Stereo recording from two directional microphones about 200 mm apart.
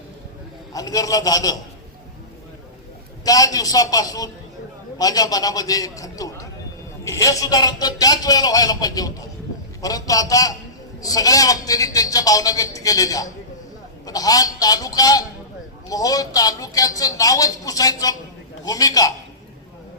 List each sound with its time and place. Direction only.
0.7 s a woman's voice: 15° left (ahead or behind)
3.2 s a woman's voice: 15° left (ahead or behind)